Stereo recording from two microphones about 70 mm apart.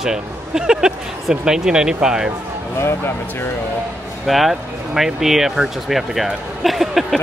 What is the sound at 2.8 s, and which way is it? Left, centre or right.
Speech, left.